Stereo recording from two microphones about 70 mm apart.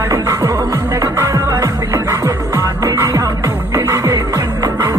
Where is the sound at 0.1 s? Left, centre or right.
Right.